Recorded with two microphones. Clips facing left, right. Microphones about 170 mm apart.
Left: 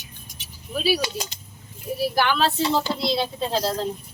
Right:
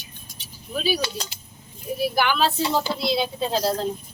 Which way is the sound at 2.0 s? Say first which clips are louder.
Even; 5° right (ahead or behind).